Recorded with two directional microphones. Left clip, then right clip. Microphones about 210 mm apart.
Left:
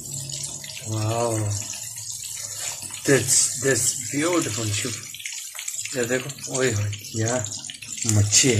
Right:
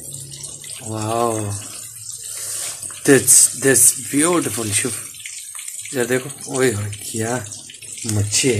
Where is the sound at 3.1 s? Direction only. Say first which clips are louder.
Right 6 dB; 55° right (ahead or behind).